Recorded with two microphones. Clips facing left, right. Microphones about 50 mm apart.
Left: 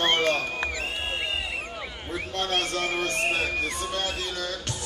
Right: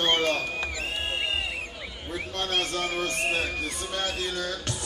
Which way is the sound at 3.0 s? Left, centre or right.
Centre.